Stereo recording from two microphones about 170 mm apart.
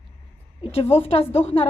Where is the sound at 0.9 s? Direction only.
35° left (ahead or behind).